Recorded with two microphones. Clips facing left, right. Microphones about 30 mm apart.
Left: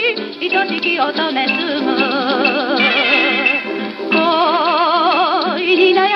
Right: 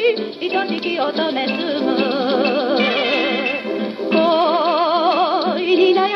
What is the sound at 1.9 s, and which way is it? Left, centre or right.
Music, centre.